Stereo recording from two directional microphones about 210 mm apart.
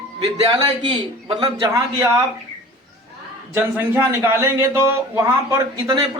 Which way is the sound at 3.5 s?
10° right (ahead or behind).